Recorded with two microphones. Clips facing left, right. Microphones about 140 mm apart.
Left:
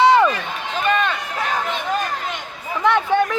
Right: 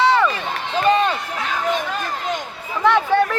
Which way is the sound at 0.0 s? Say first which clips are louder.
Left 3 dB; 15° left (ahead or behind).